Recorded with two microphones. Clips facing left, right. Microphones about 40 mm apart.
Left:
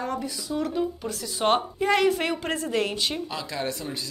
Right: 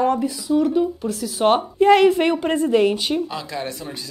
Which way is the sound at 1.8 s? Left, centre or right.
Right.